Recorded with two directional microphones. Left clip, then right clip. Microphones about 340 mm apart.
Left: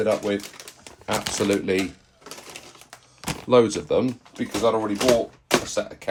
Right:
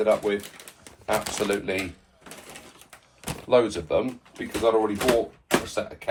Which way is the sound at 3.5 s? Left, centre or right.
Left.